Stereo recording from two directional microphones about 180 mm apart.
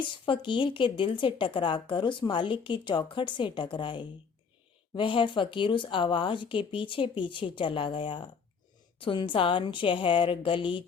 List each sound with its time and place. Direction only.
0.0 s speech: 25° left (ahead or behind)